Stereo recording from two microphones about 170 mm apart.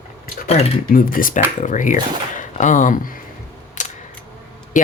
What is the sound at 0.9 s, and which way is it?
Speech, 55° left (ahead or behind).